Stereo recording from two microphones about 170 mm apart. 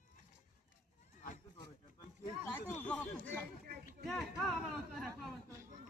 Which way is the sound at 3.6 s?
65° right (ahead or behind).